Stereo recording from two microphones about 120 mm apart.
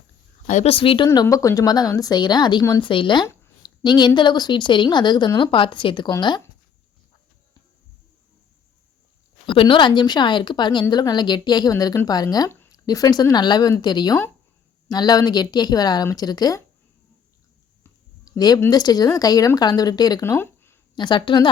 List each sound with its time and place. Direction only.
0.4 s speech: 90° left
0.7 s speech: 50° left (ahead or behind)
1.0 s speech: 30° left (ahead or behind)
2.8 s speech: 45° left (ahead or behind)
9.5 s speech: 45° left (ahead or behind)
18.3 s speech: 35° left (ahead or behind)
20.9 s speech: 40° left (ahead or behind)